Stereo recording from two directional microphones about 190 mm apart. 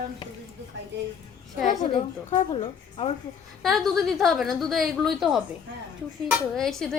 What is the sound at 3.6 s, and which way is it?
A woman's voice, centre (ahead or behind).